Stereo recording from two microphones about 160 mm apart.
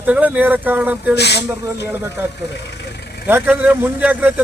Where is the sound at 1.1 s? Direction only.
90° left.